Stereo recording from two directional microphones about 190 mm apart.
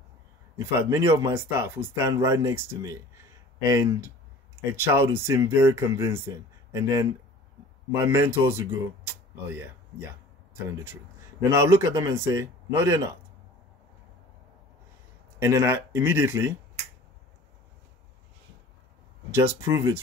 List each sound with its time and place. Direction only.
0.6 s speech: 15° right (ahead or behind)
11.5 s speech: 15° right (ahead or behind)
15.3 s speech: 15° right (ahead or behind)
19.3 s speech: 15° right (ahead or behind)